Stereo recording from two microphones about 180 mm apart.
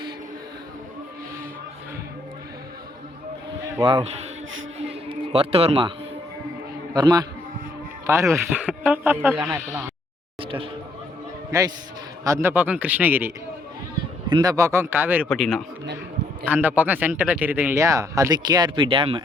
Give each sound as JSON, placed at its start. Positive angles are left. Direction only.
{"t": 3.8, "sound": "a man's voice", "side_deg": -20}
{"t": 4.9, "sound": "music", "side_deg": -30}
{"t": 6.9, "sound": "a man's voice", "side_deg": -20}
{"t": 8.4, "sound": "speech", "side_deg": -5}
{"t": 10.4, "sound": "a sound", "side_deg": -30}
{"t": 11.5, "sound": "a man's voice", "side_deg": -20}
{"t": 14.3, "sound": "speech", "side_deg": -25}
{"t": 15.3, "sound": "speech", "side_deg": 0}